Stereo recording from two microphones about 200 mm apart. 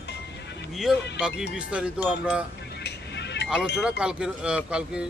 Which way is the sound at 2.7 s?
60° left (ahead or behind).